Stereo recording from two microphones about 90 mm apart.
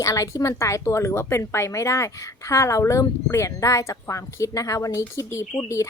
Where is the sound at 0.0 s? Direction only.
40° left (ahead or behind).